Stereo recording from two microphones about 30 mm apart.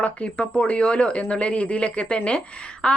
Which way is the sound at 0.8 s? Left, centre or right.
Left.